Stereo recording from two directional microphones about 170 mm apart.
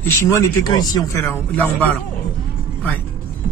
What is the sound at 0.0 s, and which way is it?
Speech, 15° left (ahead or behind).